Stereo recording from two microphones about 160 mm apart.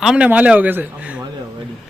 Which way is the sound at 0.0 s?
5° right (ahead or behind).